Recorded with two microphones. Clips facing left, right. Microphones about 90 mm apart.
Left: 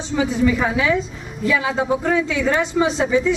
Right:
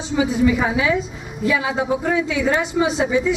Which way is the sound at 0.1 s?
10° right (ahead or behind).